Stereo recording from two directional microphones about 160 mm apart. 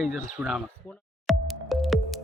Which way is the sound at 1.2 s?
Centre (ahead or behind).